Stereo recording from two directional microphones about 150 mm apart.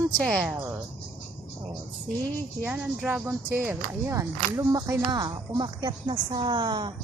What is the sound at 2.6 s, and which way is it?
Speech, 10° right (ahead or behind).